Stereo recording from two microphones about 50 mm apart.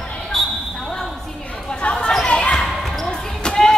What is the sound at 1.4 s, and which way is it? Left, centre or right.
Chatter, left.